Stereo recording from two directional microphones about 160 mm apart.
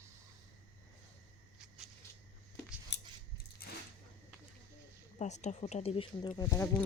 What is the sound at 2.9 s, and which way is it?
Chewing, 90° left.